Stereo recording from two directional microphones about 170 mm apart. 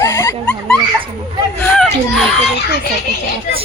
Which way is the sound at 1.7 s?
5° left (ahead or behind).